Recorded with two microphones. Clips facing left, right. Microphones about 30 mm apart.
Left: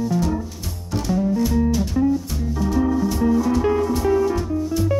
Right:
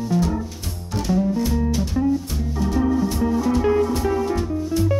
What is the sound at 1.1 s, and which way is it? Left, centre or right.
Music, centre.